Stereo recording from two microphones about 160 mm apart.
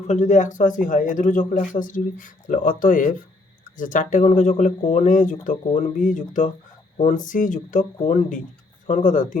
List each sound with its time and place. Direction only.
0.1 s a man's voice: 50° left (ahead or behind)